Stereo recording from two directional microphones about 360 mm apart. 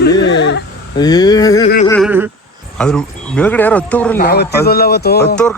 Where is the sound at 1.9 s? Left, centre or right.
Centre.